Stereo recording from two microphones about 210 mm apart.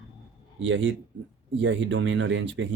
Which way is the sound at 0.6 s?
65° right (ahead or behind).